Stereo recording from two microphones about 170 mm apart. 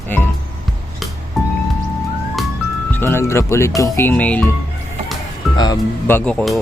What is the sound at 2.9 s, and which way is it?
Speech, 15° left (ahead or behind).